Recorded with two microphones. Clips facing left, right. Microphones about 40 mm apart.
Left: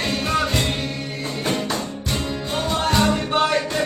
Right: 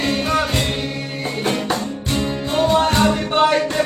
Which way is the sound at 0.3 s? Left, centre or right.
Centre.